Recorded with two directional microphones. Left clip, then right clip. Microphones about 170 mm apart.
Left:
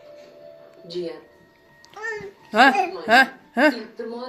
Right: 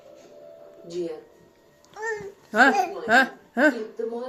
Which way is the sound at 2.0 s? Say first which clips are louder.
Even; 20° right (ahead or behind).